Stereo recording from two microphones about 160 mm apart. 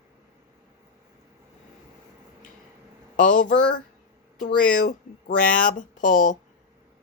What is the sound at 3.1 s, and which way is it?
Speech, 55° left (ahead or behind).